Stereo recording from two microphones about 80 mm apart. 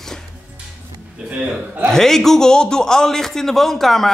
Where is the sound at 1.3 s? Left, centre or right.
Centre.